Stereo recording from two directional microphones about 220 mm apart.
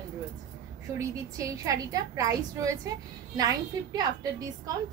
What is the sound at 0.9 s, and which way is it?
A woman's voice, 15° right (ahead or behind).